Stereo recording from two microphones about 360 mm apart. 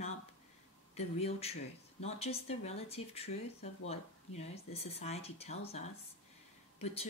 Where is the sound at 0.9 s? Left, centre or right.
Centre.